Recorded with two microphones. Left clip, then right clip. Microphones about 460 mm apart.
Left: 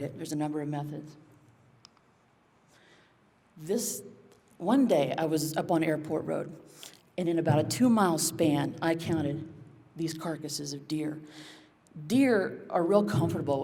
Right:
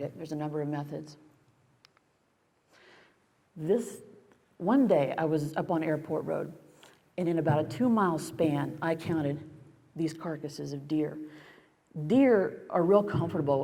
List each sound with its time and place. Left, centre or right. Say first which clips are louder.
0.0 s a man's voice: left 2 dB; right
2.7 s a sound: right 3 dB; right
4.6 s a man's voice: even; right